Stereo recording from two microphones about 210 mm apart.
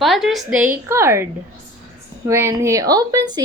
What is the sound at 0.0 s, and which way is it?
A woman's voice, centre (ahead or behind).